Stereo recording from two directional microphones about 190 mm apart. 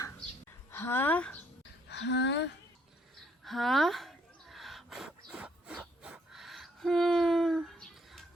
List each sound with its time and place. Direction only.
0.7 s speech: 10° left (ahead or behind)
1.9 s speech: 65° left (ahead or behind)
3.4 s a sound: centre (ahead or behind)